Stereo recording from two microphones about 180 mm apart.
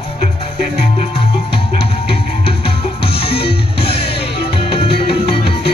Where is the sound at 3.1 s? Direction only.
30° left (ahead or behind).